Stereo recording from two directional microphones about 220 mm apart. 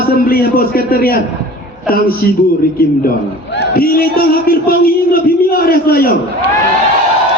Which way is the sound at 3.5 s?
45° left (ahead or behind).